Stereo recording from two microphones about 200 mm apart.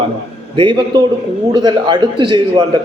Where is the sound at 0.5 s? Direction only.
25° right (ahead or behind).